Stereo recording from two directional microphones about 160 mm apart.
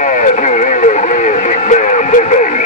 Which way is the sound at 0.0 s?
50° left (ahead or behind).